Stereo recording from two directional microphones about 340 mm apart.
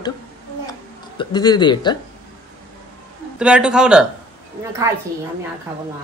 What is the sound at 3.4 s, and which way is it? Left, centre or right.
Speech, centre.